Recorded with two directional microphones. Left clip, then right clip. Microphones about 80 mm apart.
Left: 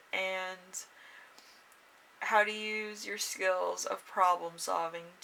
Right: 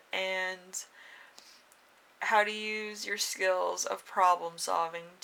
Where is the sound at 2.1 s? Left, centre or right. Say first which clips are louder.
Right 1 dB; right.